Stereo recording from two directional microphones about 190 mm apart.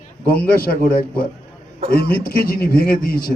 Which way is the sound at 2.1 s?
50° left (ahead or behind).